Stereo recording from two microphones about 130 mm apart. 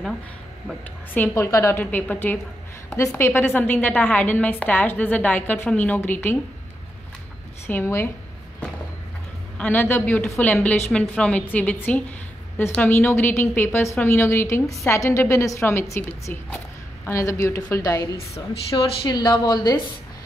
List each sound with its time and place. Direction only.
1.1 s a woman's voice: 15° left (ahead or behind)
7.6 s a woman's voice: 15° left (ahead or behind)
9.6 s a woman's voice: 15° left (ahead or behind)
18.3 s a woman's voice: 45° left (ahead or behind)
19.0 s speech: 30° left (ahead or behind)